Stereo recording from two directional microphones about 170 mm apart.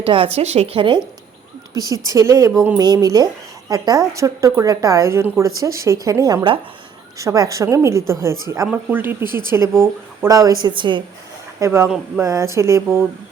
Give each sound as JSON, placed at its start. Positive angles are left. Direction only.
{"t": 0.0, "sound": "a woman's voice", "side_deg": -30}
{"t": 11.6, "sound": "a woman's voice", "side_deg": -15}